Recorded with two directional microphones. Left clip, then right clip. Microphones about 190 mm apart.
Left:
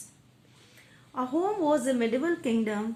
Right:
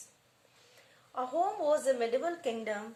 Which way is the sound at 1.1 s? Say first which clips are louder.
Left 3 dB; 35° left (ahead or behind).